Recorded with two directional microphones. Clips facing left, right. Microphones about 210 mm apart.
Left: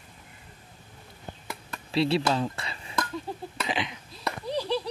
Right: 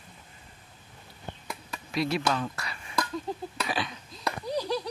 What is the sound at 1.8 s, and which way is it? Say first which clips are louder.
Speech: left 3 dB; 30° left (ahead or behind).